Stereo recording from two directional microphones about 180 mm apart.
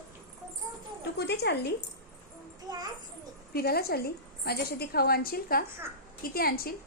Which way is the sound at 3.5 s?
60° left (ahead or behind).